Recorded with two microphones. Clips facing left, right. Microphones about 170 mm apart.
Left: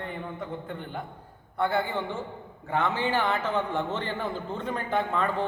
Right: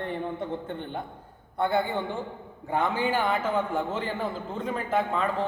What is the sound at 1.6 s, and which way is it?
A man's voice, 15° right (ahead or behind).